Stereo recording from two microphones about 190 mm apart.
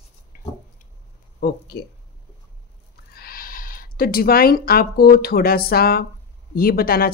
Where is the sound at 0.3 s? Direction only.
45° left (ahead or behind).